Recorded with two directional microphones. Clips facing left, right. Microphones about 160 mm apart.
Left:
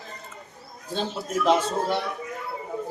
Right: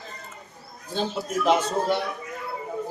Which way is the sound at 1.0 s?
Centre (ahead or behind).